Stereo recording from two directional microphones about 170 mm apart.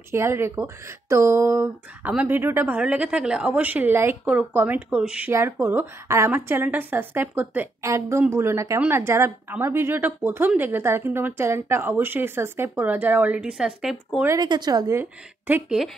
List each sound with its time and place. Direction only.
0.1 s a woman's voice: 15° right (ahead or behind)
14.2 s a woman's voice: 20° right (ahead or behind)